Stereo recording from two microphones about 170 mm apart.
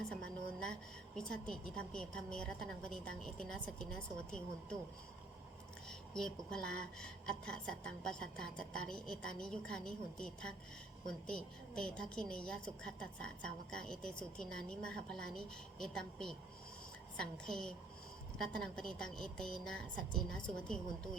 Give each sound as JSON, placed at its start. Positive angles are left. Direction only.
{"t": 0.6, "sound": "a woman's voice", "side_deg": 5}
{"t": 5.9, "sound": "a woman's voice", "side_deg": 5}